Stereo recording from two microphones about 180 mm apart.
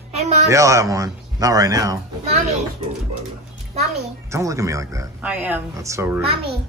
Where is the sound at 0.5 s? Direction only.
15° right (ahead or behind).